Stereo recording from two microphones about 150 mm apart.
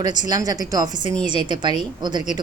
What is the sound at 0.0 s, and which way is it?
A woman's voice, 25° right (ahead or behind).